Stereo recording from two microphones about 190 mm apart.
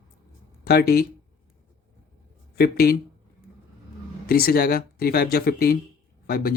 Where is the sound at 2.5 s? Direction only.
55° left (ahead or behind).